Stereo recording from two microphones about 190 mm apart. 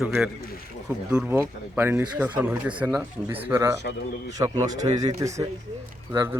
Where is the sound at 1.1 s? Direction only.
10° right (ahead or behind).